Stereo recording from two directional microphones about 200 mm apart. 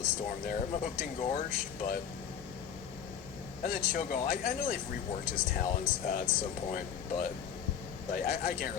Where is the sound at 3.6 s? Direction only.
45° left (ahead or behind).